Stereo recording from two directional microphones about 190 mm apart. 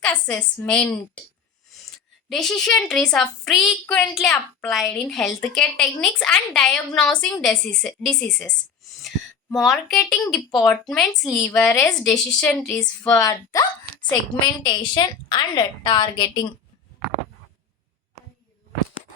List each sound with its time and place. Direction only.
0.0 s a woman's voice: 5° left (ahead or behind)
2.3 s a woman's voice: centre (ahead or behind); by 16.5 s 20° left (ahead or behind)